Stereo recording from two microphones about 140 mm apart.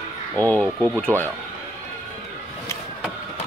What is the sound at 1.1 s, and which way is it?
Speech, 20° right (ahead or behind).